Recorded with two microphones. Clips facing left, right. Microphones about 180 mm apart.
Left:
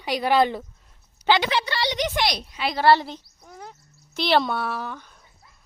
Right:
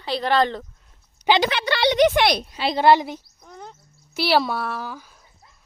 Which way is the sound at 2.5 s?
25° right (ahead or behind).